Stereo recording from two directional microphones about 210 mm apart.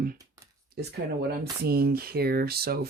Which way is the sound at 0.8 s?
50° right (ahead or behind).